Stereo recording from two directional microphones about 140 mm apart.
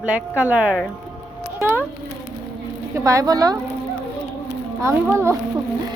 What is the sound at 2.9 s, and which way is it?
Speech, 20° right (ahead or behind).